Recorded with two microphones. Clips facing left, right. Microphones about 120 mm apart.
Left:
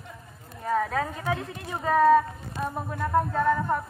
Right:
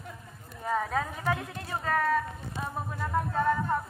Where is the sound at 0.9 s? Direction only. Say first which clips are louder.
Left 2 dB; 5° right (ahead or behind).